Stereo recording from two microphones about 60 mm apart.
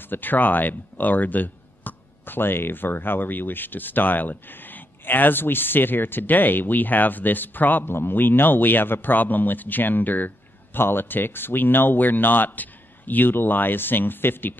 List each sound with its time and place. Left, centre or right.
0.0 s speech: left